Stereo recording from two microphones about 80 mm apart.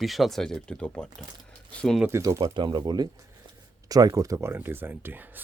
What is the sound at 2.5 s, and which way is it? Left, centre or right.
Speech, right.